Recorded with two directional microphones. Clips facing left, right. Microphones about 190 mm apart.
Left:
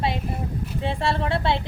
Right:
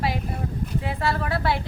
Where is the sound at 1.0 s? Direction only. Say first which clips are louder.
Left 1 dB; 25° left (ahead or behind).